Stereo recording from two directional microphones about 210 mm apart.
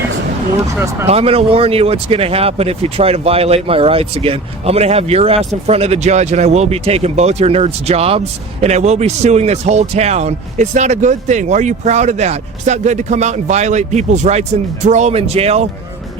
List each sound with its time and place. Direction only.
1.0 s speech: 30° right (ahead or behind)